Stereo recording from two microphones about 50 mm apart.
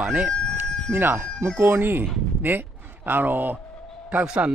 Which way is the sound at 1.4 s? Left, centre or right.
Right.